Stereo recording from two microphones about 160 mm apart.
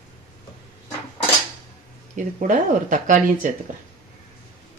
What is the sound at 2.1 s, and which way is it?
Speech, 50° right (ahead or behind).